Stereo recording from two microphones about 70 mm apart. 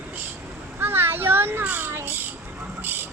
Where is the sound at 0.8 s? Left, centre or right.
Right.